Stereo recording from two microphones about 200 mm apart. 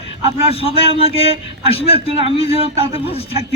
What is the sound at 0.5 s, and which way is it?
Speech, 30° left (ahead or behind).